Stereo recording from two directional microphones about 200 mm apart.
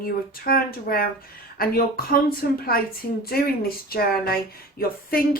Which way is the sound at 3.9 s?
50° left (ahead or behind).